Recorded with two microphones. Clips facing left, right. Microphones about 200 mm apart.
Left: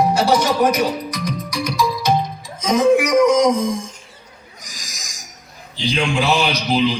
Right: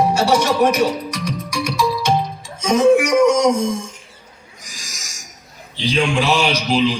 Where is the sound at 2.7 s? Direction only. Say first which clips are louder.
Right 1 dB; 30° right (ahead or behind).